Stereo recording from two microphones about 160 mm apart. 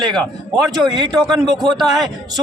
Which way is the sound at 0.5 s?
25° right (ahead or behind).